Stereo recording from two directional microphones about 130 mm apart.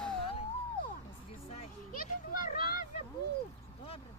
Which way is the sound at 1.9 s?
90° left.